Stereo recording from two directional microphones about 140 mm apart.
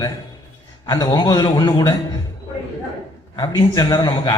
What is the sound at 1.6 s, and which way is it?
Speech, 35° left (ahead or behind).